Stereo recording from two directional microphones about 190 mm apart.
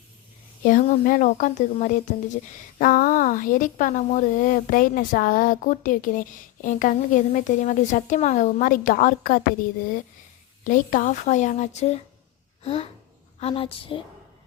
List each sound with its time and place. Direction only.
0.6 s speech: 45° left (ahead or behind)
10.6 s a woman's voice: 45° left (ahead or behind)